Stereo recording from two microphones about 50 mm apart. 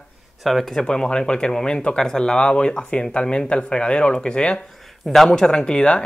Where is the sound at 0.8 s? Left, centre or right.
Centre.